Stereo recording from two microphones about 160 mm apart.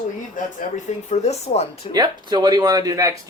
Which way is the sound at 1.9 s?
25° right (ahead or behind).